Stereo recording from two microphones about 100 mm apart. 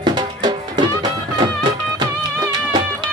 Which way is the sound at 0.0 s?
45° right (ahead or behind).